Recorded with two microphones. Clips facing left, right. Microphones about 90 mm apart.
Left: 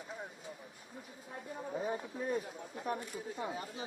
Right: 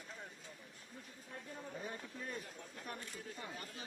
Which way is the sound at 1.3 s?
25° left (ahead or behind).